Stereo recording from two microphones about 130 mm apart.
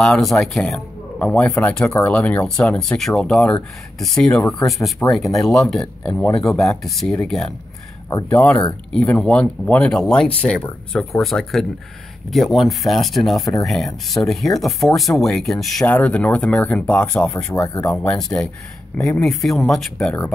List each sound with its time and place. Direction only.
0.0 s speech: centre (ahead or behind)
17.6 s speech: 25° left (ahead or behind)
18.0 s speech: 5° left (ahead or behind)